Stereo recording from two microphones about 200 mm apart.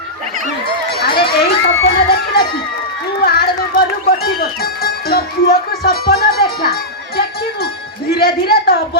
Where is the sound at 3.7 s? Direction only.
50° left (ahead or behind).